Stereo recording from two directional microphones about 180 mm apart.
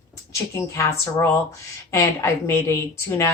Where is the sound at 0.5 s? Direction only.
15° left (ahead or behind).